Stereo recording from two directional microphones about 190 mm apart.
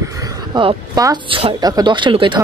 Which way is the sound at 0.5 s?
20° right (ahead or behind).